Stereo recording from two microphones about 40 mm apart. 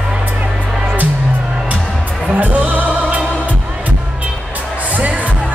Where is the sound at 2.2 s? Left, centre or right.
Right.